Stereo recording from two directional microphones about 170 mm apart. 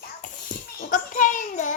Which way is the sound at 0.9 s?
50° left (ahead or behind).